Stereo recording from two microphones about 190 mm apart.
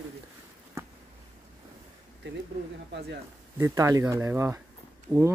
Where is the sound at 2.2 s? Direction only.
65° right (ahead or behind).